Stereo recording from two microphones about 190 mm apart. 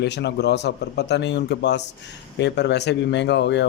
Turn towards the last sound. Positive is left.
turn(degrees=65)  # may be behind; listen again after turning